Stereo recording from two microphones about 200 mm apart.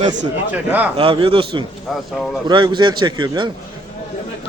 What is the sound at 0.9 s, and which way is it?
Speech, 25° right (ahead or behind).